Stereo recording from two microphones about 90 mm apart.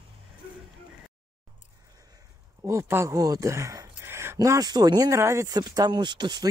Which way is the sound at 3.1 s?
40° right (ahead or behind).